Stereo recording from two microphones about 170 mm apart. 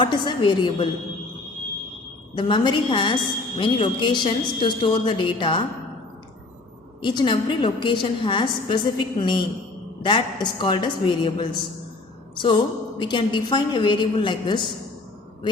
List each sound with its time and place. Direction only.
0.0 s a woman's voice: 30° left (ahead or behind)
2.3 s a woman's voice: 30° left (ahead or behind)
7.0 s a woman's voice: 25° left (ahead or behind)